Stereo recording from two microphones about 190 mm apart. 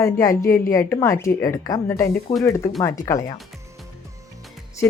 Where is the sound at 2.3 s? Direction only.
30° left (ahead or behind).